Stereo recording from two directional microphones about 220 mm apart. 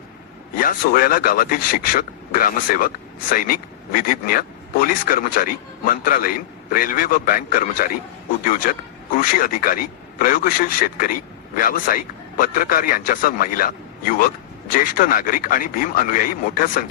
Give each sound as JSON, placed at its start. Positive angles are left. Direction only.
{"t": 0.5, "sound": "a man's voice", "side_deg": 40}